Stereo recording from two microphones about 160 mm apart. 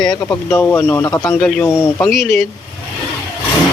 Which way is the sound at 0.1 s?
15° left (ahead or behind).